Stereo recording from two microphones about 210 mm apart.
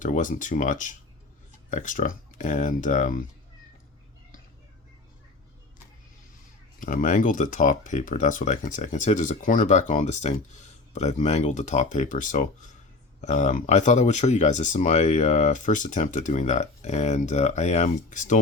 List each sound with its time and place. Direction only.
0.0 s speech: 40° left (ahead or behind)
6.7 s speech: 40° left (ahead or behind)